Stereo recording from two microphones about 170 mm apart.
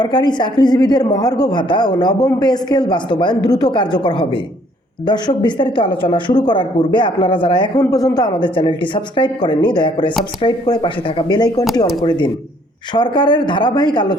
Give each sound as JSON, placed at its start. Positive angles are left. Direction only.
{"t": 0.0, "sound": "speech", "side_deg": 25}